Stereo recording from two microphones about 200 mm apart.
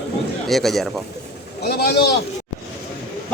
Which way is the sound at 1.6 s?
50° left (ahead or behind).